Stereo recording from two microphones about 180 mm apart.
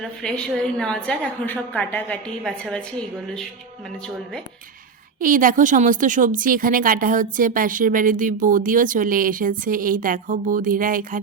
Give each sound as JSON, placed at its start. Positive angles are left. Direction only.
{"t": 0.0, "sound": "a woman's voice", "side_deg": 5}
{"t": 4.0, "sound": "a woman's voice", "side_deg": 5}
{"t": 5.2, "sound": "speech", "side_deg": -50}